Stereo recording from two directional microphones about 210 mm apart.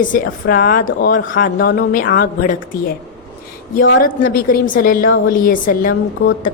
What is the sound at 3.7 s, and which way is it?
Speech, 60° left (ahead or behind).